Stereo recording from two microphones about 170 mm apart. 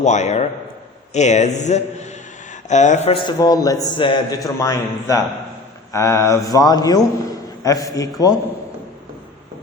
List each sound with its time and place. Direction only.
0.0 s a man's voice: 40° left (ahead or behind)
3.2 s a man's voice: 25° left (ahead or behind)